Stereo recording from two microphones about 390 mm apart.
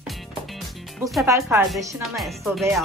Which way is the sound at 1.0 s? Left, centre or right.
Centre.